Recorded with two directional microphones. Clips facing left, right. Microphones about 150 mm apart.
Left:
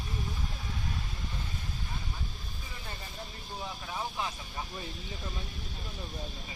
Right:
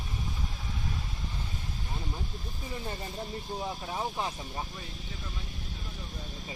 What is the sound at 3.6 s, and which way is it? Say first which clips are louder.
Speech: right 2 dB; 30° right (ahead or behind).